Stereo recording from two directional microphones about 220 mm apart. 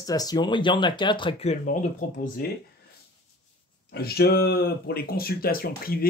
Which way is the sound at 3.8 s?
45° left (ahead or behind).